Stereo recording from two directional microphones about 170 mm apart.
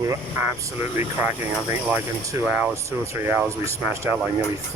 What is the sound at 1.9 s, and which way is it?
Speech, 10° right (ahead or behind).